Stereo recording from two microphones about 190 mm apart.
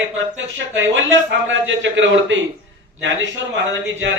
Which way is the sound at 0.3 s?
90° right.